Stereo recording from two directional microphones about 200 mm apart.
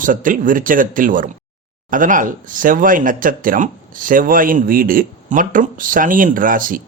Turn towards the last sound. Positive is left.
turn(degrees=-45)  # may be behind; listen again after turning